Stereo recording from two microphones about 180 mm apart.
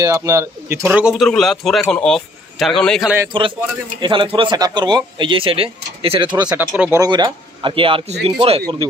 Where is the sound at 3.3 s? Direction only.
25° right (ahead or behind).